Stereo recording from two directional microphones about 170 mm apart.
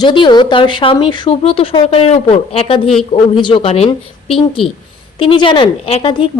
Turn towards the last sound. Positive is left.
turn(degrees=30)  # may be behind; listen again after turning